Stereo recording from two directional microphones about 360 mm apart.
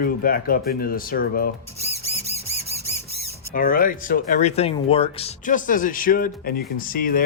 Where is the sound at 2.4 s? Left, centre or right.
Left.